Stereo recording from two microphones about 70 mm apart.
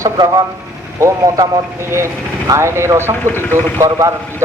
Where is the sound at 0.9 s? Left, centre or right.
Right.